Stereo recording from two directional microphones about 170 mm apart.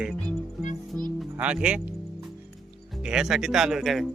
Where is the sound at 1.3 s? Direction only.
5° right (ahead or behind).